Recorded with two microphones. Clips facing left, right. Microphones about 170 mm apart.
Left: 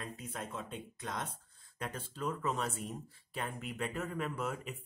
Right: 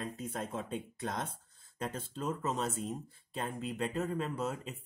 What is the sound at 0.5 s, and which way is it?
Speech, 40° right (ahead or behind).